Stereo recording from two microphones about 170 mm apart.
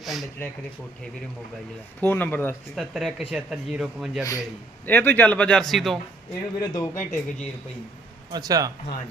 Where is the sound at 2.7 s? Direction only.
Centre (ahead or behind).